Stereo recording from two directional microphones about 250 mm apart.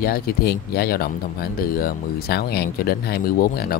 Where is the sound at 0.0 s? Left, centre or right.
Left.